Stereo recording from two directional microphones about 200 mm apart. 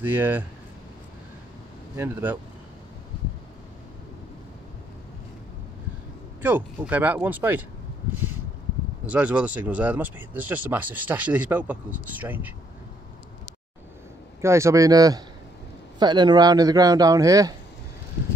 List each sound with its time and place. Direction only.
0.0 s speech: 10° right (ahead or behind)
2.0 s speech: 10° right (ahead or behind)
6.4 s speech: 10° right (ahead or behind)
9.0 s speech: 5° right (ahead or behind)
14.4 s speech: 15° right (ahead or behind)